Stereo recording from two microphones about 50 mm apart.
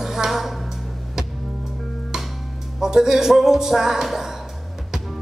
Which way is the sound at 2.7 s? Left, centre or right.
Centre.